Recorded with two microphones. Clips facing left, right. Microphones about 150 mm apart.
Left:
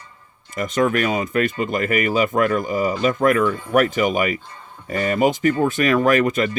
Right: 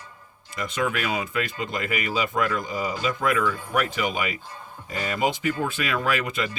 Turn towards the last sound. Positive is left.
turn(degrees=50)  # may be behind; listen again after turning